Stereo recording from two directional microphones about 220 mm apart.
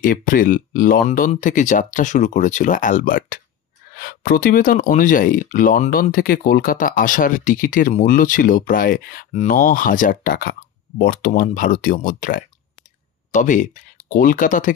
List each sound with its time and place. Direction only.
0.0 s speech: 40° left (ahead or behind)